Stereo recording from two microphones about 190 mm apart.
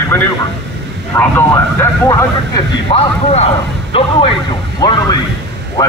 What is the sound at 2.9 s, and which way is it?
A man's voice, 30° left (ahead or behind).